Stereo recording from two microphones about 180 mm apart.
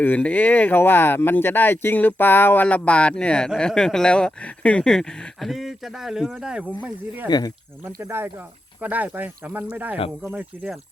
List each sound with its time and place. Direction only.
0.0 s speech: 10° left (ahead or behind)
7.3 s speech: 20° left (ahead or behind)
7.9 s speech: 15° right (ahead or behind)